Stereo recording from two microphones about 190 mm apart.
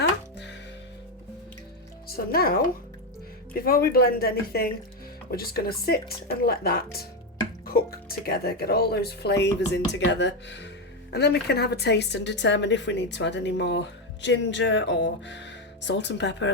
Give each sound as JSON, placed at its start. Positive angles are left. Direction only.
{"t": 2.0, "sound": "a woman's voice", "side_deg": 55}